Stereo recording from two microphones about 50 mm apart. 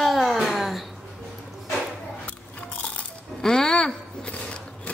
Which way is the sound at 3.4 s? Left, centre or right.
Centre.